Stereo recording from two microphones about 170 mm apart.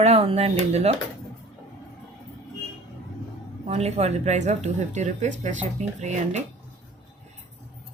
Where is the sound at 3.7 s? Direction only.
40° right (ahead or behind).